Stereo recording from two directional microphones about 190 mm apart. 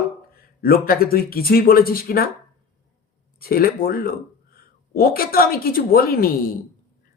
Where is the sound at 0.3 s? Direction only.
50° left (ahead or behind).